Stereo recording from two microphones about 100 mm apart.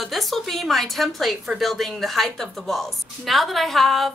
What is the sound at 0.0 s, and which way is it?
A woman's voice, centre (ahead or behind).